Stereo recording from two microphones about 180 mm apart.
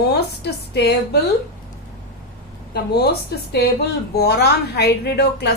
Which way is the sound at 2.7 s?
65° left (ahead or behind).